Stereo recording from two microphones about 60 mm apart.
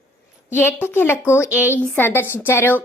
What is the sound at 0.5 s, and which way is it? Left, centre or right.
A woman's voice, left.